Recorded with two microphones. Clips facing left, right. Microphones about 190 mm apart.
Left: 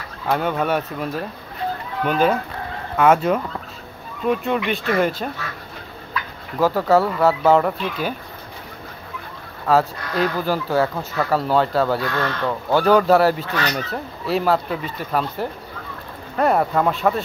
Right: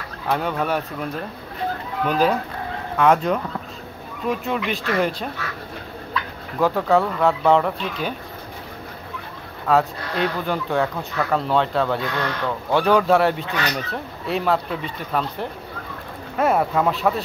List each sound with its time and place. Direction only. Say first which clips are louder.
0.3 s speech: left 2 dB; centre (ahead or behind)
2.0 s speech: left 1 dB; centre (ahead or behind)
6.6 s speech: left 2 dB; 5° left (ahead or behind)
9.7 s speech: left 1 dB; centre (ahead or behind)
12.0 s speech: left 2 dB; 15° right (ahead or behind)
12.4 s speech: left 2 dB; centre (ahead or behind)